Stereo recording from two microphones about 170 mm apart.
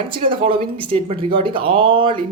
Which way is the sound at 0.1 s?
30° right (ahead or behind).